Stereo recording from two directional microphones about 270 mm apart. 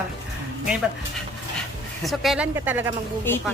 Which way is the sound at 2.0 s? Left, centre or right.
Centre.